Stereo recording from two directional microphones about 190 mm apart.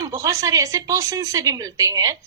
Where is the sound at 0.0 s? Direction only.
15° right (ahead or behind).